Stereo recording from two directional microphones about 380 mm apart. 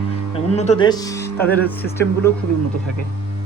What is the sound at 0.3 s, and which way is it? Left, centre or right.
Speech, centre.